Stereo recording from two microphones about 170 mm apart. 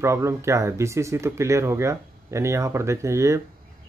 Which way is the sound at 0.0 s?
15° right (ahead or behind).